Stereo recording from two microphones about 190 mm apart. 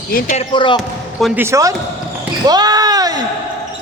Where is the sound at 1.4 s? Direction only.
15° right (ahead or behind).